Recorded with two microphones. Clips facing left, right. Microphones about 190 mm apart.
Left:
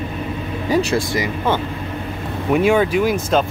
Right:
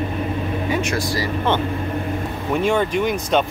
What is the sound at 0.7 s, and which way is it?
Speech, 35° left (ahead or behind).